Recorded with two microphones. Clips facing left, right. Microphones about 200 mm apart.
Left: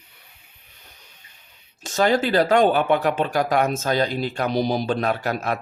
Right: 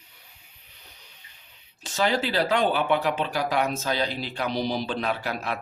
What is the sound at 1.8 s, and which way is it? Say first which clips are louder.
Speech: left 5 dB; 45° left (ahead or behind).